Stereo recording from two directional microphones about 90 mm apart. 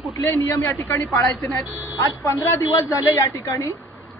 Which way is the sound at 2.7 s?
45° left (ahead or behind).